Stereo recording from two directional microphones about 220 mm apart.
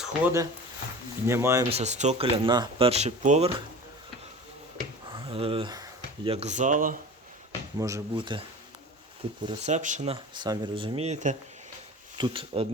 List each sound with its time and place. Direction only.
0.0 s speech: 10° right (ahead or behind)
1.7 s speech: 30° right (ahead or behind)
5.1 s speech: 25° right (ahead or behind)
7.8 s speech: 15° right (ahead or behind)
9.5 s speech: 30° right (ahead or behind)
10.3 s speech: 20° right (ahead or behind)
12.1 s speech: 20° right (ahead or behind)